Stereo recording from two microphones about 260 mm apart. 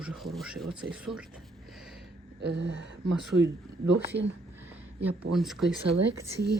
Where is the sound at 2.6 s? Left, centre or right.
Right.